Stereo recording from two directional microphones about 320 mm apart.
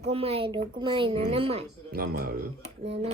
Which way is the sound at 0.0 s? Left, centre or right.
Centre.